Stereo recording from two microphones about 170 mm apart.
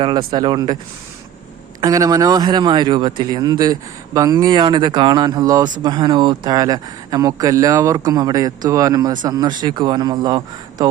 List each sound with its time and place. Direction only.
0.0 s speech: 30° right (ahead or behind)
1.8 s speech: 20° right (ahead or behind)